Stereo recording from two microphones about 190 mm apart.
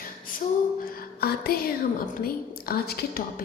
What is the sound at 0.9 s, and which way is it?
Music, 50° left (ahead or behind).